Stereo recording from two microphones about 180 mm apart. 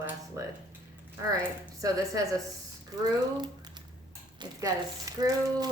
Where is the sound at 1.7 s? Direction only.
20° right (ahead or behind).